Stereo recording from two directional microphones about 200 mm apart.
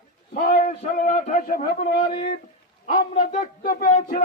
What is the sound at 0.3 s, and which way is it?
A man's voice, 45° left (ahead or behind).